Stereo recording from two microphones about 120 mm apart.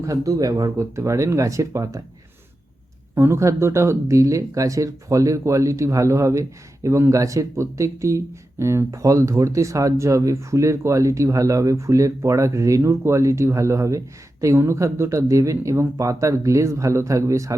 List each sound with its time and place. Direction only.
0.0 s speech: 25° right (ahead or behind)
3.2 s speech: 20° right (ahead or behind)